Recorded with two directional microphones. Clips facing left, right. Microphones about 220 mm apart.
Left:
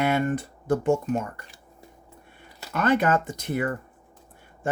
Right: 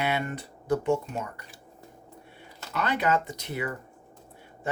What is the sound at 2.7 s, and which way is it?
Speech, 50° left (ahead or behind).